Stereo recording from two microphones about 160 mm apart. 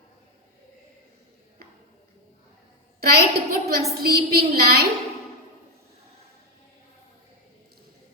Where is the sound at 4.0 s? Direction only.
70° right (ahead or behind).